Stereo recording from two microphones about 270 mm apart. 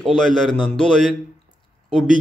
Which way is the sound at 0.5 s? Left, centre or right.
Centre.